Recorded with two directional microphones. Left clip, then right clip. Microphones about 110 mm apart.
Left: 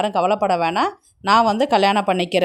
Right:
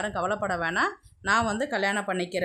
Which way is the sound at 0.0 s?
45° left (ahead or behind).